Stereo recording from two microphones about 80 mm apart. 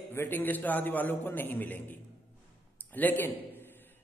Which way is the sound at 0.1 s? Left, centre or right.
Left.